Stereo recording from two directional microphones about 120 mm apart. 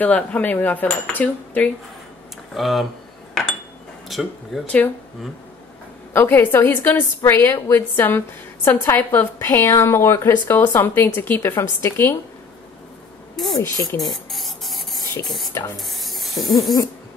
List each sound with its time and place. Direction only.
0.0 s a sound: 15° left (ahead or behind)
2.5 s speech: centre (ahead or behind)
4.1 s speech: centre (ahead or behind)
4.6 s a sound: 15° left (ahead or behind)
6.1 s a woman's voice: 20° left (ahead or behind)
7.6 s a sound: 20° left (ahead or behind)
8.6 s a woman's voice: 15° left (ahead or behind)
13.6 s a woman's voice: 25° left (ahead or behind)
14.0 s spray: centre (ahead or behind)
15.2 s speech: centre (ahead or behind)
15.8 s spray: centre (ahead or behind)